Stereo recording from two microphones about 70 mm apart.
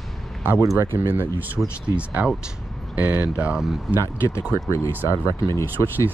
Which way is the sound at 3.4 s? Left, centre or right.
Centre.